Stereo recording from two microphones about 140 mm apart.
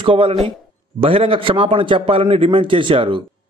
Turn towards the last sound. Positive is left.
turn(degrees=-35)  # may be behind; listen again after turning